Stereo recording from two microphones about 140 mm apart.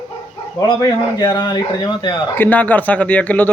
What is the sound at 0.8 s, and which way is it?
Speech, 30° left (ahead or behind).